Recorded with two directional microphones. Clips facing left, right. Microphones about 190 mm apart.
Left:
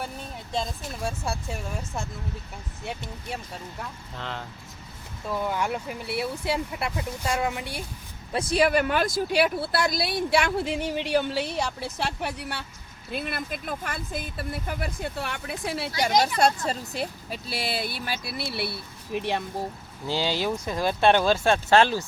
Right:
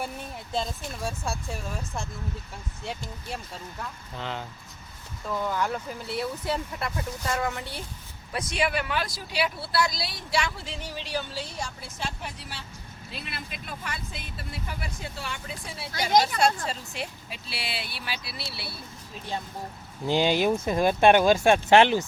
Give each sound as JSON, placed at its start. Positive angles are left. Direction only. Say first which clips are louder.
{"t": 0.5, "sound": "speech", "louder": "even", "side_deg": 0}
{"t": 4.2, "sound": "speech", "louder": "right 1 dB", "side_deg": 0}
{"t": 5.3, "sound": "speech", "louder": "left 1 dB", "side_deg": 10}
{"t": 8.3, "sound": "speech", "louder": "left 6 dB", "side_deg": 30}
{"t": 13.1, "sound": "speech", "louder": "left 9 dB", "side_deg": 55}
{"t": 16.0, "sound": "speech", "louder": "even", "side_deg": 50}
{"t": 20.1, "sound": "speech", "louder": "right 4 dB", "side_deg": -20}